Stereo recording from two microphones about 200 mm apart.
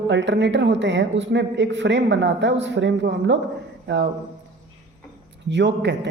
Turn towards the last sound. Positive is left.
turn(degrees=-60)  # may be behind; listen again after turning